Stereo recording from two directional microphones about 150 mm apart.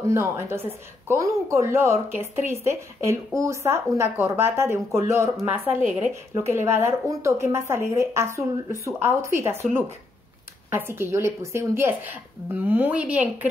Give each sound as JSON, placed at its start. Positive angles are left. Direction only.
{"t": 0.0, "sound": "a woman's voice", "side_deg": -20}
{"t": 10.7, "sound": "a woman's voice", "side_deg": -15}